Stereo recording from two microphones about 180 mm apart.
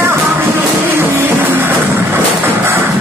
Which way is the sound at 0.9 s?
10° right (ahead or behind).